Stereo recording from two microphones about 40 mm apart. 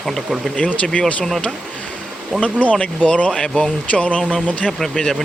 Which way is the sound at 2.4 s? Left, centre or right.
Left.